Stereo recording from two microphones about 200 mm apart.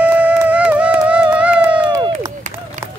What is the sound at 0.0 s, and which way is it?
Music, 5° right (ahead or behind).